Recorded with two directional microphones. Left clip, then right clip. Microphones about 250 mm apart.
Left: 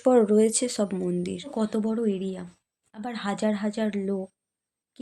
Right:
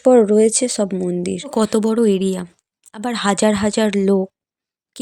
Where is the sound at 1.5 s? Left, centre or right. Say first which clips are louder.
Right 12 dB; right.